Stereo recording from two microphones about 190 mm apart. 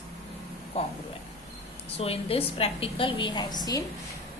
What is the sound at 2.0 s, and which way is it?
A woman's voice, 30° left (ahead or behind).